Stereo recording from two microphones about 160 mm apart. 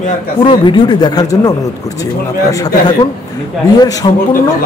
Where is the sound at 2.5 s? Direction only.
25° left (ahead or behind).